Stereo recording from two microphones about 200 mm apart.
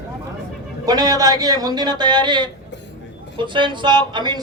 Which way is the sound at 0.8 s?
20° right (ahead or behind).